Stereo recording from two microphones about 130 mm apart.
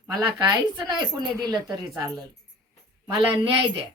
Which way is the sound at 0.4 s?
35° right (ahead or behind).